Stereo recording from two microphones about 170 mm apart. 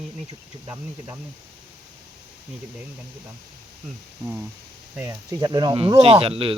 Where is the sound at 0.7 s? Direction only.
15° right (ahead or behind).